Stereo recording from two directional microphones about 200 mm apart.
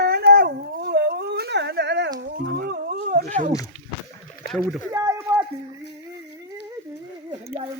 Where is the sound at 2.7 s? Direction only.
45° right (ahead or behind).